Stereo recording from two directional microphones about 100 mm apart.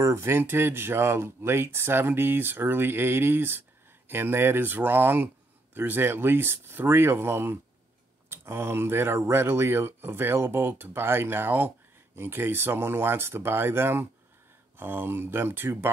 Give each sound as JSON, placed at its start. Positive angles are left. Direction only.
{"t": 0.0, "sound": "speech", "side_deg": -25}